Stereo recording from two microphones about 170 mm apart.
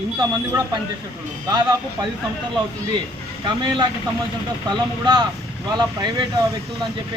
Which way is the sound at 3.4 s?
25° right (ahead or behind).